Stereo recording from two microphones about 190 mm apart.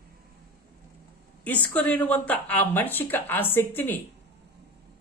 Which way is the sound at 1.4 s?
5° left (ahead or behind).